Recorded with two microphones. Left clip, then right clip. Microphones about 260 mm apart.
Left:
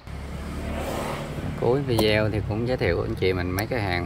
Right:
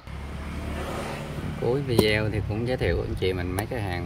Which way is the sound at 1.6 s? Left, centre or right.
Centre.